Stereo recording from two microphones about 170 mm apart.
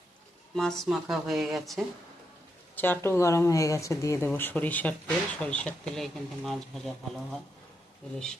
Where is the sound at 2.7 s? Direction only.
10° left (ahead or behind).